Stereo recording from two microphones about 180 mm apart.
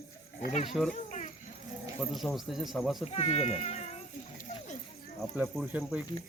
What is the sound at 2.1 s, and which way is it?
Speech, centre (ahead or behind).